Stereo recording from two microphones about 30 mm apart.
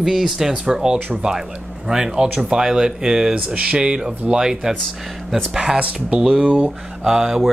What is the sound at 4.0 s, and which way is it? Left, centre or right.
Speech, right.